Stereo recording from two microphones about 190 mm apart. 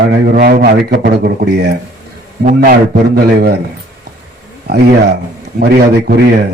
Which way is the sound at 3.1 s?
55° right (ahead or behind).